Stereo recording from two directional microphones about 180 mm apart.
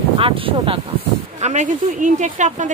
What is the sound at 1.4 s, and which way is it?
Speech, 40° right (ahead or behind).